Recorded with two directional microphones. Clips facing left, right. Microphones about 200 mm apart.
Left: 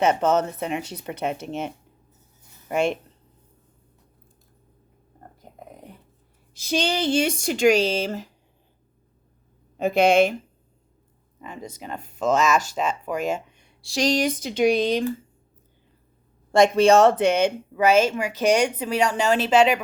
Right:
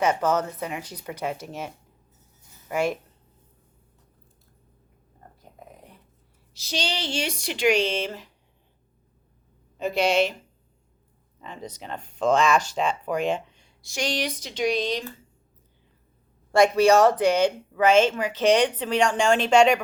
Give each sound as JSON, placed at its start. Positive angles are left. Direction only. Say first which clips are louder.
{"t": 0.0, "sound": "speech", "louder": "left 3 dB", "side_deg": 25}
{"t": 6.5, "sound": "speech", "louder": "left 6 dB", "side_deg": 50}
{"t": 9.7, "sound": "speech", "louder": "left 5 dB", "side_deg": 55}
{"t": 11.3, "sound": "a woman's voice", "louder": "left 1 dB", "side_deg": 10}
{"t": 13.5, "sound": "a sound", "louder": "left 2 dB", "side_deg": 55}
{"t": 13.8, "sound": "speech", "louder": "left 6 dB", "side_deg": 35}
{"t": 16.5, "sound": "speech", "louder": "left 2 dB", "side_deg": 25}
{"t": 17.7, "sound": "a woman's voice", "louder": "even", "side_deg": 10}